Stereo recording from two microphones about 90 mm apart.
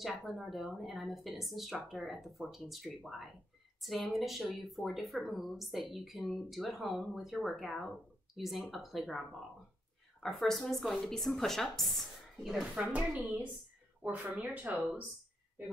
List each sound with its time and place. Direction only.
0.2 s a woman's voice: centre (ahead or behind)
10.2 s a woman's voice: 5° left (ahead or behind)
12.8 s speech: 15° right (ahead or behind)